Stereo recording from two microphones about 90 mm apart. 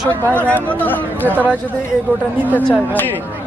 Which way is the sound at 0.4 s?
15° left (ahead or behind).